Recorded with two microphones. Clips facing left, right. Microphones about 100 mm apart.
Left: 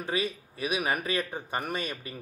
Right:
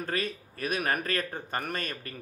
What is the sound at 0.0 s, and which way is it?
Speech, 5° left (ahead or behind).